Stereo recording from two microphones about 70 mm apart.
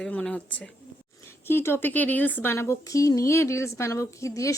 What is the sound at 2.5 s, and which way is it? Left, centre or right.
A woman's voice, left.